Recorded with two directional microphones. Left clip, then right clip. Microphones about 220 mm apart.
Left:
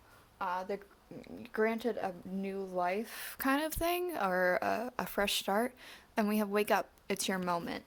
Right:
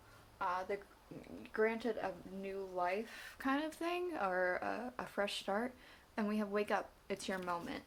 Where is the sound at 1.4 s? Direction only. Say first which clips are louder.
Left 3 dB; 40° left (ahead or behind).